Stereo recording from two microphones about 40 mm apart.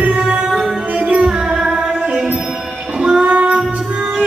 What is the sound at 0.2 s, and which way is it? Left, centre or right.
Music, right.